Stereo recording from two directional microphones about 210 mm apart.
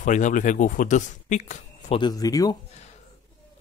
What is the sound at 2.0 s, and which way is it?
Speech, 15° left (ahead or behind).